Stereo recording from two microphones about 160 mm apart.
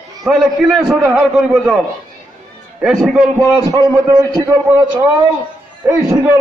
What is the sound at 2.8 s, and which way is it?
Speech, centre (ahead or behind).